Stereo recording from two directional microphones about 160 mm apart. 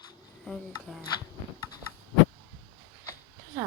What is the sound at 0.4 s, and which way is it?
Speech, centre (ahead or behind).